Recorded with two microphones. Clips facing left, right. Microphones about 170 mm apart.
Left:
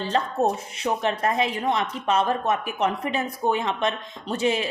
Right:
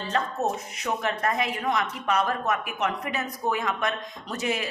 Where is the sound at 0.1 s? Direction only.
30° left (ahead or behind).